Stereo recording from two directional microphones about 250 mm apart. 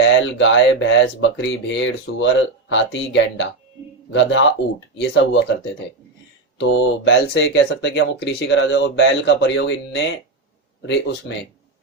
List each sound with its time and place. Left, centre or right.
0.0 s speech: left
6.6 s speech: left
11.3 s speech: left